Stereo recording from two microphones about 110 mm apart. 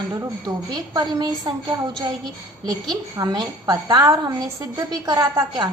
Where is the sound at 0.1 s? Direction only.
35° right (ahead or behind).